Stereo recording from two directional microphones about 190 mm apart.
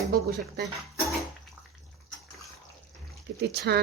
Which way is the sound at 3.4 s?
60° right (ahead or behind).